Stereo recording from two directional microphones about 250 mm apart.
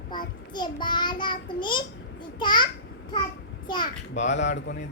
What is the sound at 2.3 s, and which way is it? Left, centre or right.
Speech, centre.